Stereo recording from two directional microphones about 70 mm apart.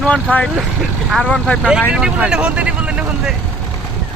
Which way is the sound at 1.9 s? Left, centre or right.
Centre.